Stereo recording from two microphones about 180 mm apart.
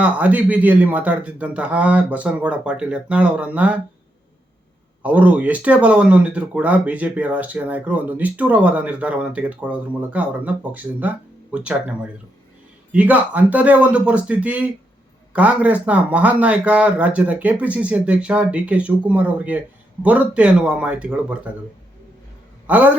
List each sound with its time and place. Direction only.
0.0 s speech: 5° right (ahead or behind)
5.0 s speech: 10° right (ahead or behind)
22.6 s a man's voice: 10° right (ahead or behind)